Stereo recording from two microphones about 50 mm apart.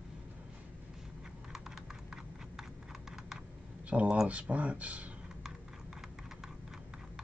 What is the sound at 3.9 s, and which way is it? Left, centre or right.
Speech, right.